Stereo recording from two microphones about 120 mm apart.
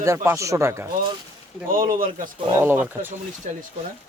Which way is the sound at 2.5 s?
20° right (ahead or behind).